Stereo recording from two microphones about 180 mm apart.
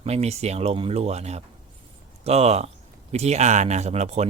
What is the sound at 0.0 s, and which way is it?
Speech, 35° right (ahead or behind).